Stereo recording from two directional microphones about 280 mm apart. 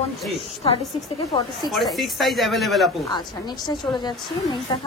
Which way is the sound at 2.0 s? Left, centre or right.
Centre.